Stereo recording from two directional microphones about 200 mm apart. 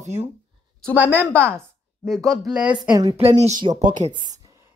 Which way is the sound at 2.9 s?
20° right (ahead or behind).